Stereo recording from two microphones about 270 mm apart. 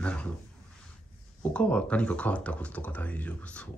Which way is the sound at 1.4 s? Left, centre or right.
Centre.